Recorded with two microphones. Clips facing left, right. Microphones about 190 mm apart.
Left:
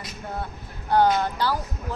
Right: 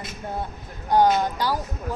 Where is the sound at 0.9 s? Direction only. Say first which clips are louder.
Right 1 dB; 15° right (ahead or behind).